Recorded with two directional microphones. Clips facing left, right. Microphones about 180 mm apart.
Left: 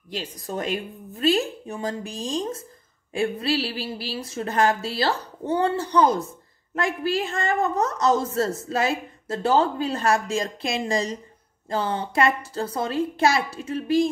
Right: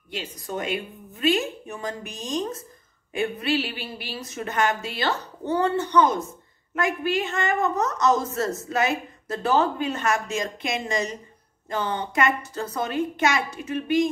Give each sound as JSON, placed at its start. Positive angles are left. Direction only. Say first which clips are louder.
{"t": 0.1, "sound": "speech", "louder": "left 1 dB", "side_deg": 35}